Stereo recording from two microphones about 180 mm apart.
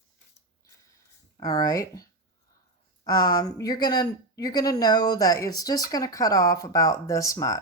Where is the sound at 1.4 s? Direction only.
20° left (ahead or behind).